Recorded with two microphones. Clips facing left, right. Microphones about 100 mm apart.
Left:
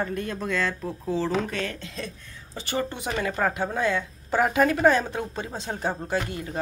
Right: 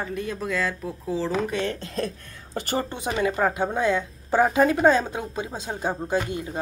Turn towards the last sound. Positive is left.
turn(degrees=-20)  # may be behind; listen again after turning